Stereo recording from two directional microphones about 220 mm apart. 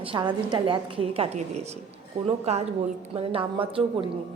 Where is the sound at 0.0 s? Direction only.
20° right (ahead or behind).